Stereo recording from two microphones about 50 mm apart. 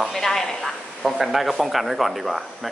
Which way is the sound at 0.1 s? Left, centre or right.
Centre.